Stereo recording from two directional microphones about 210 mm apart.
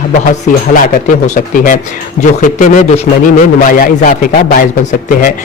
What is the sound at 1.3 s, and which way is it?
A man's voice, 40° left (ahead or behind).